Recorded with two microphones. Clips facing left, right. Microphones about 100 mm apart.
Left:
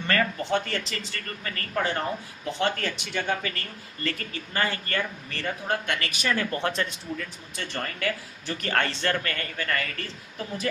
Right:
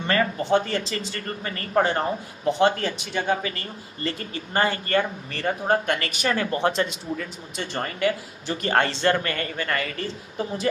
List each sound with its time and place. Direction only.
0.1 s speech: 25° right (ahead or behind)
6.3 s speech: 20° right (ahead or behind)